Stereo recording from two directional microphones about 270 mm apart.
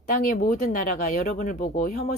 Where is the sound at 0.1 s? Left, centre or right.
Left.